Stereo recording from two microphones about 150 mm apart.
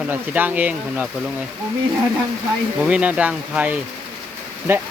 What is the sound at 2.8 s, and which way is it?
Speech, 5° right (ahead or behind).